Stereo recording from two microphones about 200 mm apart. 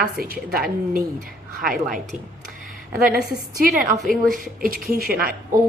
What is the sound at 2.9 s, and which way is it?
A woman's voice, 45° right (ahead or behind).